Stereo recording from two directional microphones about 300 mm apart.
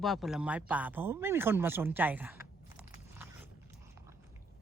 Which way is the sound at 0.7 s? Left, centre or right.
Centre.